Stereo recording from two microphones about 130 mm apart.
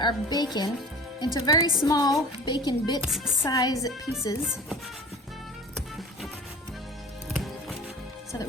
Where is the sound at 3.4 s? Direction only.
25° left (ahead or behind).